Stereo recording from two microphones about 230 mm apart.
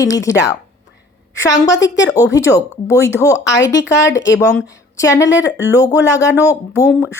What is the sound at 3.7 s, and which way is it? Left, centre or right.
Speech, left.